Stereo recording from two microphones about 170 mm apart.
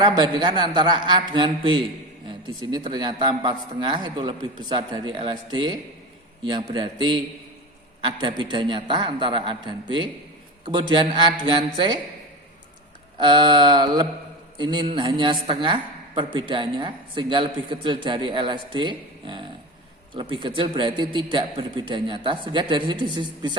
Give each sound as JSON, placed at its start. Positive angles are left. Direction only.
{"t": 0.0, "sound": "a woman's voice", "side_deg": -25}
{"t": 13.1, "sound": "a woman's voice", "side_deg": -30}